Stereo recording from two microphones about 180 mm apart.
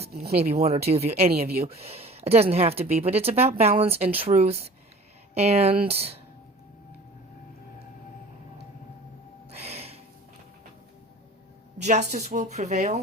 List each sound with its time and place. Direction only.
0.1 s speech: 55° right (ahead or behind)
0.9 s speech: 35° right (ahead or behind)
1.3 s speech: 60° right (ahead or behind)
1.7 s speech: 35° right (ahead or behind)
9.5 s a sound: 35° right (ahead or behind)
11.8 s speech: 40° right (ahead or behind)